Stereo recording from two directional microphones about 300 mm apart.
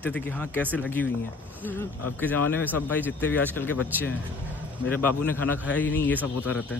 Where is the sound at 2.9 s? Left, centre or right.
Centre.